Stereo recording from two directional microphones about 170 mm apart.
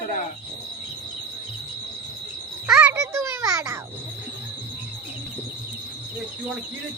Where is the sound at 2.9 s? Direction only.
15° right (ahead or behind).